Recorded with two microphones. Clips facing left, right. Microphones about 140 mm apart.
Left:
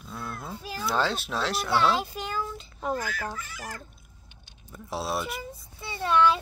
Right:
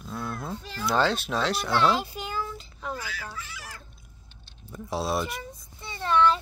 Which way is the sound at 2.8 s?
45° left (ahead or behind).